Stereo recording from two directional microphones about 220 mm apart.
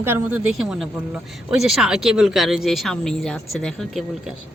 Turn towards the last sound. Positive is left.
turn(degrees=0)  # may be behind; listen again after turning